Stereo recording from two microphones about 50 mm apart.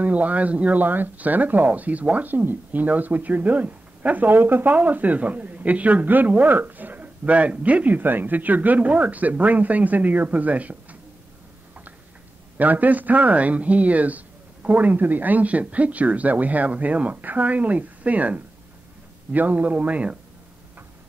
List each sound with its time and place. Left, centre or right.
0.0 s speech: right
12.5 s speech: right